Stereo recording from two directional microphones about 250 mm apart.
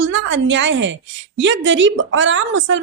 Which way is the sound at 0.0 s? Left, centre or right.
Right.